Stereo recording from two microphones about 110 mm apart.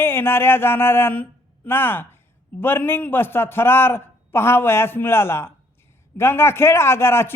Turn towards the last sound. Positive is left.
turn(degrees=25)  # may be behind; listen again after turning